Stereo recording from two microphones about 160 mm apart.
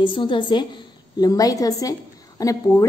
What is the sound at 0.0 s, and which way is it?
A woman's voice, 30° left (ahead or behind).